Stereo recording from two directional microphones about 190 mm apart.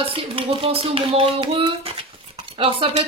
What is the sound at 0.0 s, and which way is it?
Speech, 30° right (ahead or behind).